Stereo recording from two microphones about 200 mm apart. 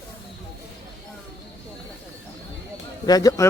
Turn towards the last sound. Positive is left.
turn(degrees=20)  # may be behind; listen again after turning